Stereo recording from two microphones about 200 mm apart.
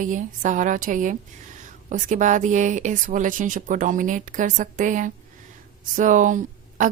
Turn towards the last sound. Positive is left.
turn(degrees=-40)  # may be behind; listen again after turning